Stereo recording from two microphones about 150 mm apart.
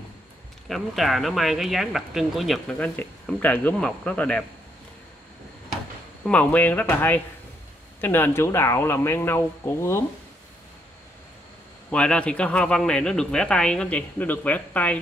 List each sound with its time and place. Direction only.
0.7 s speech: centre (ahead or behind)
2.7 s speech: 10° left (ahead or behind)
6.2 s speech: 10° left (ahead or behind)
11.9 s speech: 5° left (ahead or behind)